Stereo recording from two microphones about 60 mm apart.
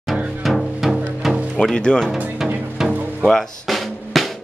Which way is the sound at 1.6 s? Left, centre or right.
Centre.